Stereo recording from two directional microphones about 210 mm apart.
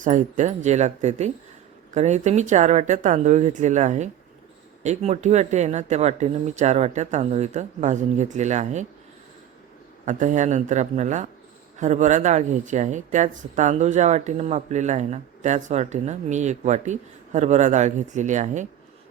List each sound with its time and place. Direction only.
0.0 s speech: 35° right (ahead or behind)
10.1 s speech: 35° right (ahead or behind)